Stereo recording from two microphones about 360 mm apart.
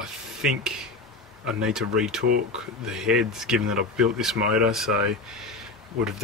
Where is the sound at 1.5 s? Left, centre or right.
Centre.